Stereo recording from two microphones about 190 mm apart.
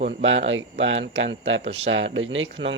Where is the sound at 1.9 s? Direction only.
85° right.